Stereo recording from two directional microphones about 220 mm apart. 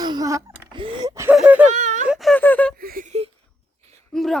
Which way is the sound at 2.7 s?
40° right (ahead or behind).